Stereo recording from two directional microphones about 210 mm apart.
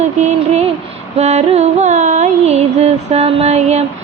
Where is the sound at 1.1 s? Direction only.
30° right (ahead or behind).